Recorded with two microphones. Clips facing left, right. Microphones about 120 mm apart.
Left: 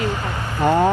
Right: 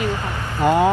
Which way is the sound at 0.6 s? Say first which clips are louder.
Even; 15° right (ahead or behind).